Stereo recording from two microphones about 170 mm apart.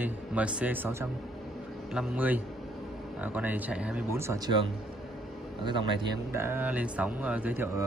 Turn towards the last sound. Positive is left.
turn(degrees=-10)  # may be behind; listen again after turning